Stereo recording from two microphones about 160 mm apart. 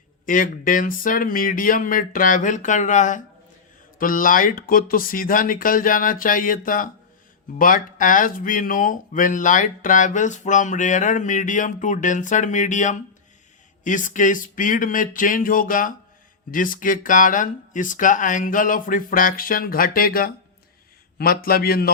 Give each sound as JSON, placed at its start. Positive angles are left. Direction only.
{"t": 0.3, "sound": "a man's voice", "side_deg": 55}